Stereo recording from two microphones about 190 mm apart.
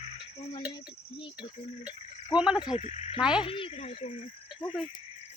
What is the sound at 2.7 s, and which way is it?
Speech, 35° left (ahead or behind).